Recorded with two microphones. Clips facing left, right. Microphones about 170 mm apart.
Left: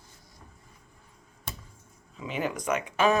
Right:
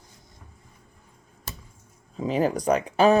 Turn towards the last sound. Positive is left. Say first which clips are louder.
# right 6 dB
turn(degrees=-35)  # may be behind; listen again after turning